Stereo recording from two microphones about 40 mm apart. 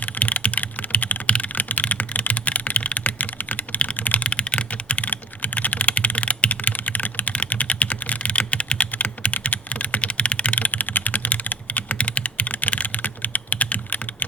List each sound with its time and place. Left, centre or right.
0.0 s typing: left
4.3 s typing: left
8.9 s computer keyboard: left
10.0 s typing: left